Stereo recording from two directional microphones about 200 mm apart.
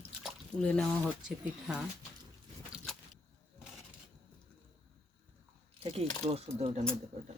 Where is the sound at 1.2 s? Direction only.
5° right (ahead or behind).